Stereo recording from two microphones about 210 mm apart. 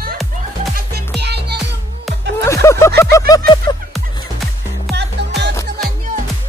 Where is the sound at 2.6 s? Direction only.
15° left (ahead or behind).